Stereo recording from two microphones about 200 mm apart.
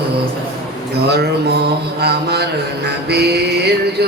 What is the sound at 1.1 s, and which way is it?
Mantra, 55° right (ahead or behind).